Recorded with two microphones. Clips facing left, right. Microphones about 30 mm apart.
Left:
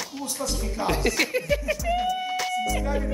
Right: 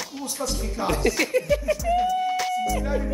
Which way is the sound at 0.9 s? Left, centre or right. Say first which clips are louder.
Right 2 dB; centre.